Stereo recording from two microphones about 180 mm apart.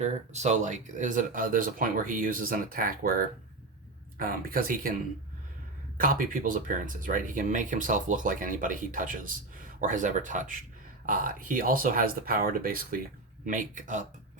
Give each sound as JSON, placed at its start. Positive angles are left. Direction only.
{"t": 0.0, "sound": "speech", "side_deg": -40}
{"t": 6.0, "sound": "speech", "side_deg": -50}